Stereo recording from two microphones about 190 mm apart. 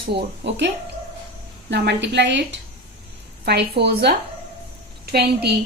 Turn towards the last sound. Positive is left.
turn(degrees=-55)  # may be behind; listen again after turning